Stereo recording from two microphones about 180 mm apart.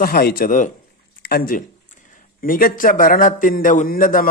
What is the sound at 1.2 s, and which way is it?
A man's voice, 60° left (ahead or behind).